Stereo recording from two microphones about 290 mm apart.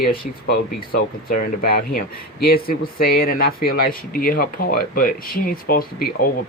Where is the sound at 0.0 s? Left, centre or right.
Left.